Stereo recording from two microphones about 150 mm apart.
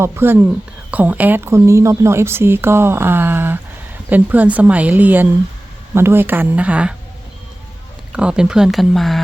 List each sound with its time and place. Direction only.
0.0 s speech: 15° right (ahead or behind)
8.1 s speech: 5° right (ahead or behind)